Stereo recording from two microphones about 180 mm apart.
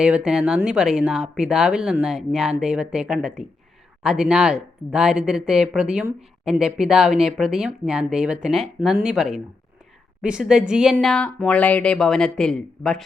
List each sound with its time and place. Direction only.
0.0 s speech: 5° right (ahead or behind)